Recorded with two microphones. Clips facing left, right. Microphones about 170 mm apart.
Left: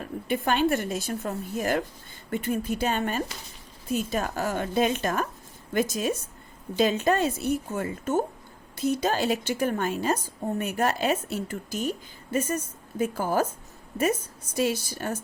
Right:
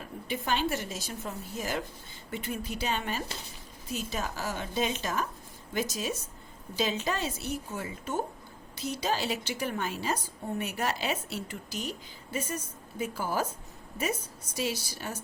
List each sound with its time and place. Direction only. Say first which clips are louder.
0.0 s a woman's voice: left 7 dB; 55° left (ahead or behind)
14.5 s a woman's voice: left 7 dB; 55° left (ahead or behind)